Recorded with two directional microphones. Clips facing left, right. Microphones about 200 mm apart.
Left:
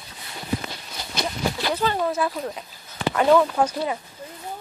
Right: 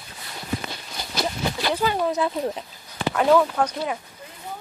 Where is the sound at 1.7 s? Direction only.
15° right (ahead or behind).